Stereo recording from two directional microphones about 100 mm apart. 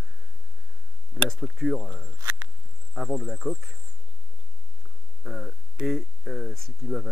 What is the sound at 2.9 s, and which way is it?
Speech, centre (ahead or behind).